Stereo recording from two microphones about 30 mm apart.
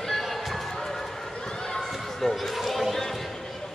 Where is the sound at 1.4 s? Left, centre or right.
Centre.